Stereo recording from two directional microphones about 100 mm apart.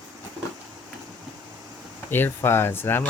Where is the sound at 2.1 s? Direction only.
20° left (ahead or behind).